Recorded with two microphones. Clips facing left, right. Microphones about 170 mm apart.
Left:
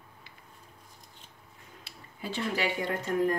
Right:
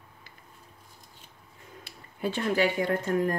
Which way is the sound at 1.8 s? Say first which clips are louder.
Right 9 dB; 55° right (ahead or behind).